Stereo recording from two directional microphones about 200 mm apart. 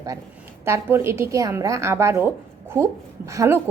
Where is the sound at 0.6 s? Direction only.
10° right (ahead or behind).